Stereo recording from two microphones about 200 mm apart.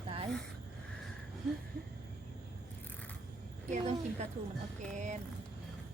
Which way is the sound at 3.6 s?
35° right (ahead or behind).